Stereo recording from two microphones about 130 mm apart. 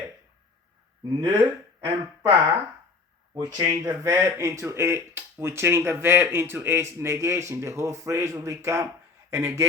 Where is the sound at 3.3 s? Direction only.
30° right (ahead or behind).